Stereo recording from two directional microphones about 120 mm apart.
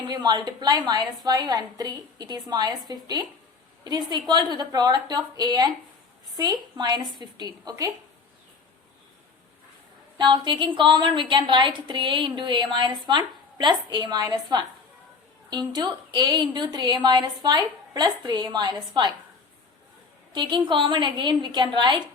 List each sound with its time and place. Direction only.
0.1 s a woman's voice: 35° right (ahead or behind)
10.2 s a woman's voice: 40° right (ahead or behind)
20.3 s a woman's voice: 40° right (ahead or behind)